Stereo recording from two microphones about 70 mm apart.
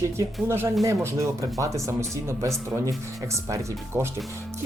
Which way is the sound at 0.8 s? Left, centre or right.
Right.